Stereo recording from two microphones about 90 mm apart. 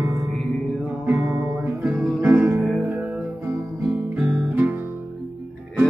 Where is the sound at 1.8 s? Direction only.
10° right (ahead or behind).